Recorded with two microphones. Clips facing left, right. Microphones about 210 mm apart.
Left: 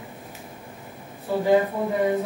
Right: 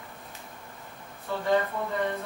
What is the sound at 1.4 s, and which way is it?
Speech, 10° left (ahead or behind).